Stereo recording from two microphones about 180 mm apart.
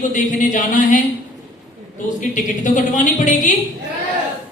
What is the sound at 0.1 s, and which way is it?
Speech, 45° left (ahead or behind).